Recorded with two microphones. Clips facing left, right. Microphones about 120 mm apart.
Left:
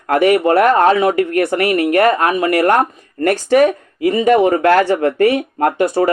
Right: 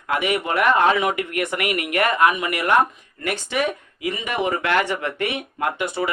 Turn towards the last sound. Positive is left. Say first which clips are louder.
# left 9 dB
turn(degrees=40)  # may be behind; listen again after turning